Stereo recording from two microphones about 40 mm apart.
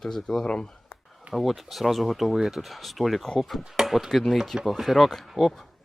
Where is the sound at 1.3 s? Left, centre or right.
Centre.